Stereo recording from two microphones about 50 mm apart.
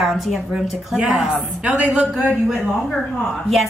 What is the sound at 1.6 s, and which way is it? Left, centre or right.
Speech, right.